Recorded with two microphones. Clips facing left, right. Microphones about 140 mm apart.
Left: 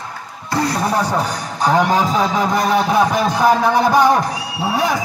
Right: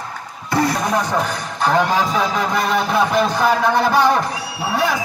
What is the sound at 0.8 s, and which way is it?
Speech, 35° left (ahead or behind).